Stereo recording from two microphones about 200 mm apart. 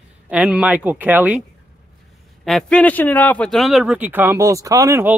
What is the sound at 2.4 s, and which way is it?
A man's voice, 5° left (ahead or behind).